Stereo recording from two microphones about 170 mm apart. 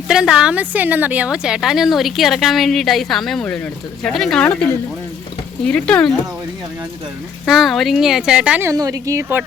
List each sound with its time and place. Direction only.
0.1 s speech: 5° right (ahead or behind)
7.4 s speech: centre (ahead or behind)
8.7 s speech: 20° right (ahead or behind)